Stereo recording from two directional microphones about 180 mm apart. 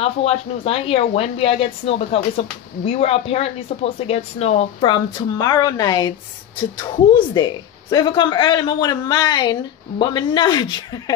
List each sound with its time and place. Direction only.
0.0 s a man's voice: 35° left (ahead or behind)